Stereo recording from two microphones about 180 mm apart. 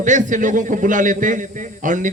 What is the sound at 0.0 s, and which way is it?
A man's voice, 45° right (ahead or behind).